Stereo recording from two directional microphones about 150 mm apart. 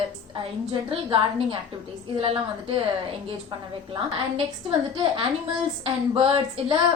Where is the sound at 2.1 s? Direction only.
40° right (ahead or behind).